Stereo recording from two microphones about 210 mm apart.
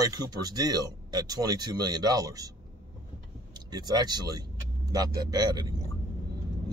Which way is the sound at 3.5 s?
20° right (ahead or behind).